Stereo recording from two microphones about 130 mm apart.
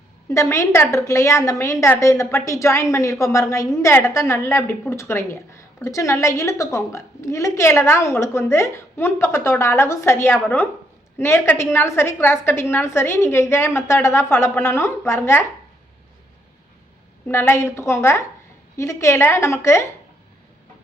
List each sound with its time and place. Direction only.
0.3 s a woman's voice: 20° left (ahead or behind)
17.2 s a woman's voice: 15° left (ahead or behind)